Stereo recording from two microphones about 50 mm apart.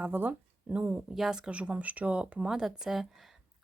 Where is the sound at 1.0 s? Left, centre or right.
Centre.